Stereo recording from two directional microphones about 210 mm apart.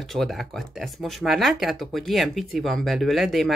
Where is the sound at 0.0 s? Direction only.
Centre (ahead or behind).